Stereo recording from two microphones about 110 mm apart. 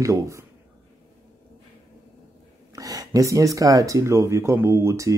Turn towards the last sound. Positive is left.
turn(degrees=-25)  # may be behind; listen again after turning